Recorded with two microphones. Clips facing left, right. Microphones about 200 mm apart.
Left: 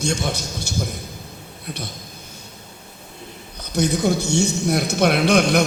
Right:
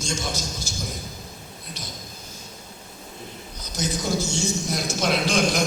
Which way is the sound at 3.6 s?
60° left (ahead or behind).